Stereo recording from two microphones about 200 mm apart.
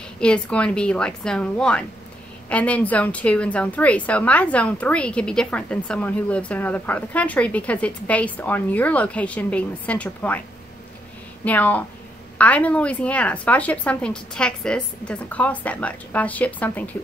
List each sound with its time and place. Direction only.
0.2 s a woman's voice: 5° left (ahead or behind)
11.4 s a woman's voice: 5° left (ahead or behind)